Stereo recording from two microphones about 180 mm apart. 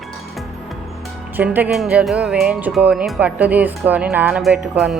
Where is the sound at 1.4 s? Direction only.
10° right (ahead or behind).